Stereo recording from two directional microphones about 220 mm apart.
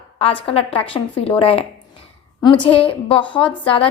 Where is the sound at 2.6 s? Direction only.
25° left (ahead or behind).